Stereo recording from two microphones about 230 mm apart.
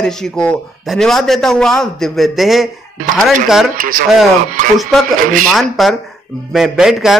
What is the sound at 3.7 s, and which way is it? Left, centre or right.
Speech, right.